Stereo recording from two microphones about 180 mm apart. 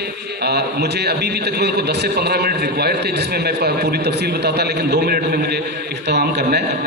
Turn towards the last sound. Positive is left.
turn(degrees=-70)  # may be behind; listen again after turning